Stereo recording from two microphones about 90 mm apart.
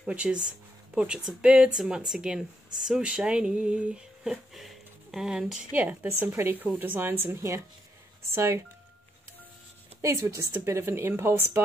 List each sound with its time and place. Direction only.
0.0 s a woman's voice: 10° right (ahead or behind); by 8.6 s 30° right (ahead or behind)
10.0 s a woman's voice: 35° right (ahead or behind)